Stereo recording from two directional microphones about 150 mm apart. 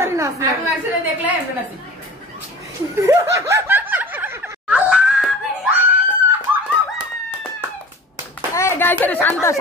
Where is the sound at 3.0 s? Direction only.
15° right (ahead or behind).